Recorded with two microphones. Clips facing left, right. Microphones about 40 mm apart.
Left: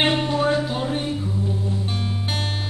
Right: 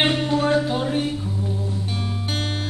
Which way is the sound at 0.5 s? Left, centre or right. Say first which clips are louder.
Right 1 dB; centre.